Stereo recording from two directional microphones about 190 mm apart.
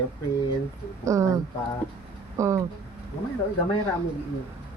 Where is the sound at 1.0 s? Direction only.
15° right (ahead or behind).